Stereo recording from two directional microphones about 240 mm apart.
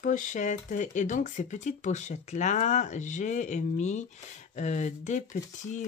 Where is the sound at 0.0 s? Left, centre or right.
Left.